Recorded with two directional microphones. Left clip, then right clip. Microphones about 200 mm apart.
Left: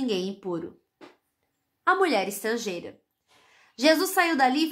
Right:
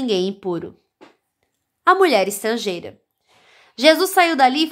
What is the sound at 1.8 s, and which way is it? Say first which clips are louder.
A woman's voice: right 8 dB; 40° right (ahead or behind).